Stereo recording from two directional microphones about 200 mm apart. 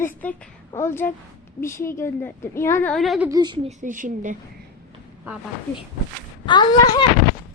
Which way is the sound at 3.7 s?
40° right (ahead or behind).